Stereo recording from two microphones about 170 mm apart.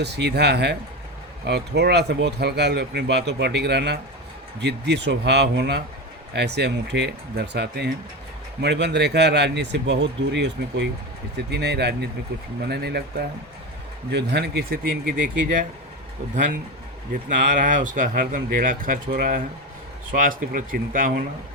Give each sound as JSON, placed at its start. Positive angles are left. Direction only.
{"t": 0.0, "sound": "a man's voice", "side_deg": -80}
{"t": 11.5, "sound": "speech", "side_deg": -75}
{"t": 14.1, "sound": "speech", "side_deg": -85}